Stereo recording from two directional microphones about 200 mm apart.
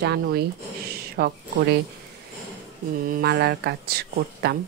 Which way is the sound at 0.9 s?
50° right (ahead or behind).